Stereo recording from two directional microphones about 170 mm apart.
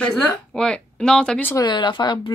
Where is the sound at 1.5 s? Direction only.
25° left (ahead or behind).